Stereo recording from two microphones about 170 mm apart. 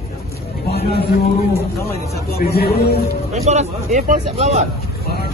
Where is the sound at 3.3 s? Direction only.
40° right (ahead or behind).